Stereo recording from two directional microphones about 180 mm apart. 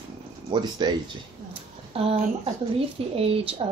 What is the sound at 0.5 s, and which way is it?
Speech, 25° right (ahead or behind).